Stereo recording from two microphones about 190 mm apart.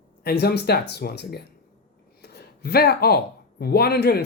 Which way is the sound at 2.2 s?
55° left (ahead or behind).